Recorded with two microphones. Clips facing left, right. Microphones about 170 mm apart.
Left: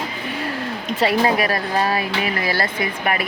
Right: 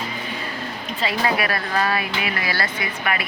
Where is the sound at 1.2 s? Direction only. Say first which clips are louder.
Left 4 dB; 40° left (ahead or behind).